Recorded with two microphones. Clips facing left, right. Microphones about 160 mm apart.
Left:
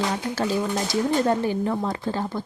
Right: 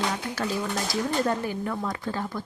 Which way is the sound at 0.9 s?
30° left (ahead or behind).